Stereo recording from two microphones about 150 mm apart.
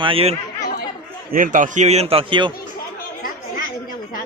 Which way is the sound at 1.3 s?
65° right (ahead or behind).